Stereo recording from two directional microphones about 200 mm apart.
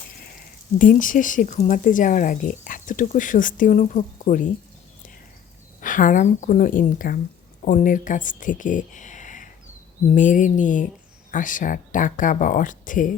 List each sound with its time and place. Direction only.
0.8 s speech: 40° left (ahead or behind)
5.8 s speech: 40° left (ahead or behind)